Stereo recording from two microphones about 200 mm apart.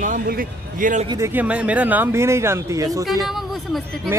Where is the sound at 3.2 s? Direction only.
Centre (ahead or behind).